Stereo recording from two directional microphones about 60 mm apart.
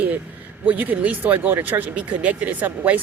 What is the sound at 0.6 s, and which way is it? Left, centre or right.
Speech, right.